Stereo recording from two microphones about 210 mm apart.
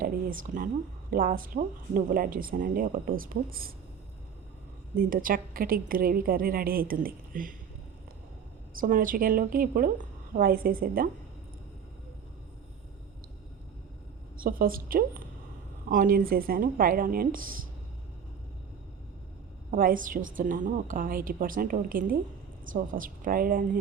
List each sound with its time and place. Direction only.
0.0 s speech: 40° right (ahead or behind)
4.9 s a woman's voice: 40° right (ahead or behind)
8.7 s a woman's voice: 40° right (ahead or behind)
14.3 s a woman's voice: 45° right (ahead or behind)
19.7 s speech: 40° right (ahead or behind)